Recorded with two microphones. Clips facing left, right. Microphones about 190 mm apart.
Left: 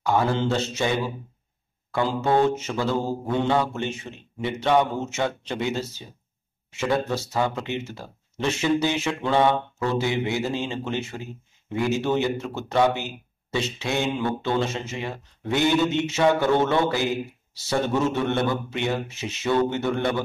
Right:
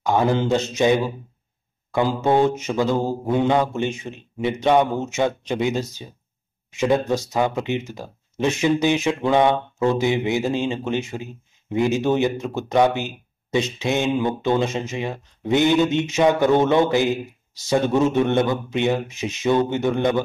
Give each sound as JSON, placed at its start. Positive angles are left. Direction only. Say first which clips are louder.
{"t": 0.0, "sound": "speech", "louder": "right 3 dB", "side_deg": -15}
{"t": 2.2, "sound": "speech", "louder": "right 2 dB", "side_deg": -15}